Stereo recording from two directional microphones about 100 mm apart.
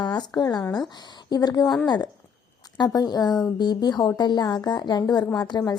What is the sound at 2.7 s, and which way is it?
A woman's voice, 45° left (ahead or behind).